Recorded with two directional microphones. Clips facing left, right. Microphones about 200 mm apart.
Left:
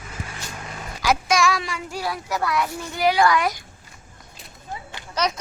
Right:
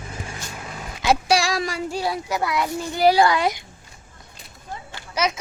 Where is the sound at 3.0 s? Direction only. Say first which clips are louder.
Right 2 dB; 35° right (ahead or behind).